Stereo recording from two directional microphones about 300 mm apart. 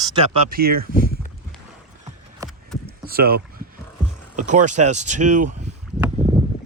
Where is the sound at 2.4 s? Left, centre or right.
Centre.